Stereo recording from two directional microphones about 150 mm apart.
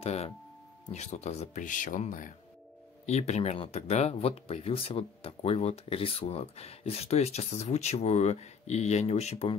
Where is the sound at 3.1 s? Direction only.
45° left (ahead or behind).